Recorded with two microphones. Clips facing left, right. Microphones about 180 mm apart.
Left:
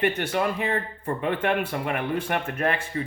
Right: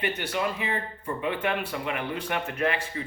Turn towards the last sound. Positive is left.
turn(degrees=45)  # may be behind; listen again after turning